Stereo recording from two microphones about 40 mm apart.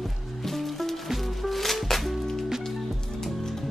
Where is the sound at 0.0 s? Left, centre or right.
Centre.